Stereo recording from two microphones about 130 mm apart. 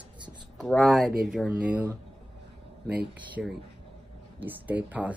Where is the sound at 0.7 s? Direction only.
Centre (ahead or behind).